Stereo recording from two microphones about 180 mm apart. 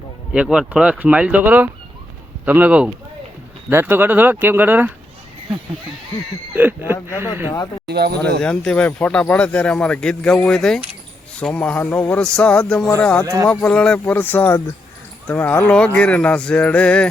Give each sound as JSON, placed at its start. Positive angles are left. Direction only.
{"t": 0.3, "sound": "speech", "side_deg": 0}
{"t": 6.6, "sound": "speech", "side_deg": -10}
{"t": 7.9, "sound": "speech", "side_deg": -65}
{"t": 8.4, "sound": "speech", "side_deg": 5}
{"t": 13.2, "sound": "speech", "side_deg": -15}
{"t": 13.5, "sound": "speech", "side_deg": 5}